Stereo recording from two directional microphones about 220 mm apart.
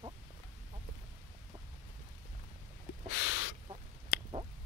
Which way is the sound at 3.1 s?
60° left (ahead or behind).